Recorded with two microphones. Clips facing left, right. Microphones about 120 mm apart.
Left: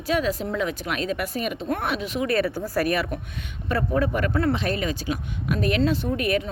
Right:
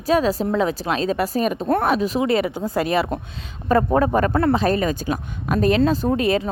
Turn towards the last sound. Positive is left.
turn(degrees=-30)  # may be behind; listen again after turning